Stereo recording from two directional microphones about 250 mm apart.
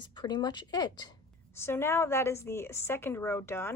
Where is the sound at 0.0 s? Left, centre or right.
Centre.